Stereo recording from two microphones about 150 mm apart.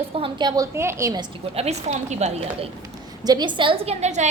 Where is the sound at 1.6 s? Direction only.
45° right (ahead or behind).